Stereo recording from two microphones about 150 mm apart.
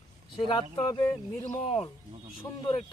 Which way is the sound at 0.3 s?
30° left (ahead or behind).